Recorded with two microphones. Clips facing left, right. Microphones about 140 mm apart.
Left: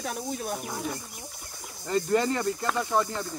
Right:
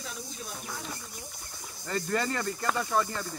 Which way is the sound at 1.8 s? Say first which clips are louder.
Left 6 dB; 15° left (ahead or behind).